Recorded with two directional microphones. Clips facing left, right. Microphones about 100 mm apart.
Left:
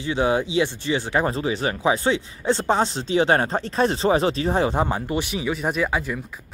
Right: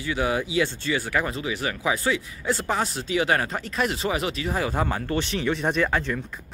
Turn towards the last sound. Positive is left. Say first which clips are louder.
# even
turn(degrees=10)  # may be behind; listen again after turning